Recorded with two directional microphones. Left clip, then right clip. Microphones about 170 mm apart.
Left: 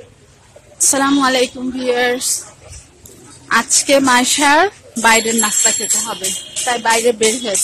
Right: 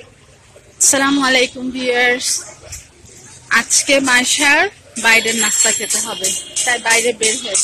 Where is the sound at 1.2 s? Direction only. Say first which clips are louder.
Even; 5° left (ahead or behind).